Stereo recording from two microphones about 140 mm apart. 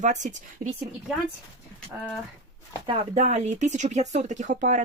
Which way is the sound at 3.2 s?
55° right (ahead or behind).